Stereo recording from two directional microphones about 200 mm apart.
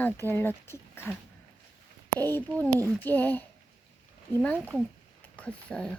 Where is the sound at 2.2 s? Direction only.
10° left (ahead or behind).